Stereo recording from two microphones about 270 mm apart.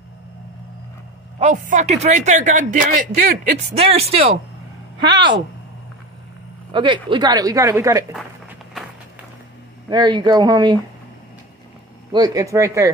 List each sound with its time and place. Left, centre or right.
1.4 s a man's voice: right
3.7 s a man's voice: right
6.7 s a woman's voice: centre
9.8 s a woman's voice: centre
12.1 s a woman's voice: centre